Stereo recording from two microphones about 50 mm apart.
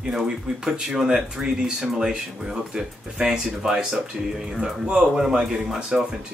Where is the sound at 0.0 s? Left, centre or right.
Centre.